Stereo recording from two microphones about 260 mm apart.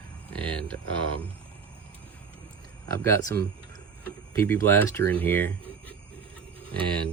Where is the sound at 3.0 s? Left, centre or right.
Centre.